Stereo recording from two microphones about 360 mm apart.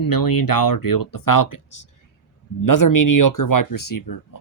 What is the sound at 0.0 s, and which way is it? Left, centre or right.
Speech, left.